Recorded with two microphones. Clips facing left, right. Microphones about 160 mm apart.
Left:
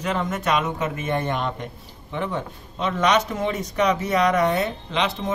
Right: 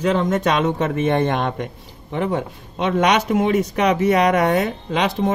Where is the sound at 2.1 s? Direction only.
90° right.